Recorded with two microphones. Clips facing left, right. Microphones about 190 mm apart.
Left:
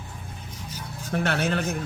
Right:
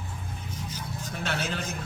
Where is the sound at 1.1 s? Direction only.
60° left (ahead or behind).